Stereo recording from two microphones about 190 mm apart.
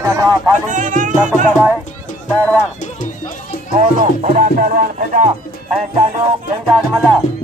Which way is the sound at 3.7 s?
40° right (ahead or behind).